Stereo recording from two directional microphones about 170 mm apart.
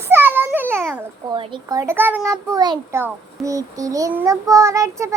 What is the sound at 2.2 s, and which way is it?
Child singing, 20° right (ahead or behind).